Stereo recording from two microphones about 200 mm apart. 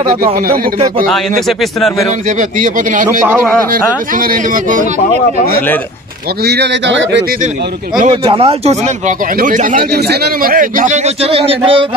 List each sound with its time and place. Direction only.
0.1 s speech: 45° right (ahead or behind)
1.0 s speech: centre (ahead or behind)
2.2 s speech: 40° right (ahead or behind)
6.4 s speech: 55° right (ahead or behind)
8.0 s speech: 30° right (ahead or behind)